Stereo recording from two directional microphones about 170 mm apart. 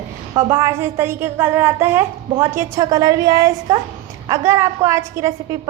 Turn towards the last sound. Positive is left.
turn(degrees=-15)  # may be behind; listen again after turning